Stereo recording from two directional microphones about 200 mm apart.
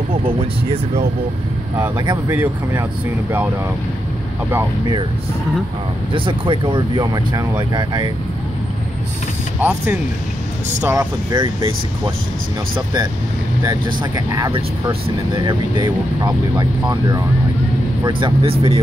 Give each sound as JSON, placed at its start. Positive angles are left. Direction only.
{"t": 1.8, "sound": "speech", "side_deg": -15}
{"t": 4.5, "sound": "speech", "side_deg": -10}
{"t": 6.1, "sound": "speech", "side_deg": -25}
{"t": 9.6, "sound": "speech", "side_deg": -5}
{"t": 12.7, "sound": "speech", "side_deg": -20}